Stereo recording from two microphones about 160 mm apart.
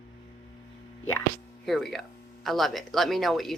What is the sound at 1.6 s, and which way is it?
Speech, centre (ahead or behind).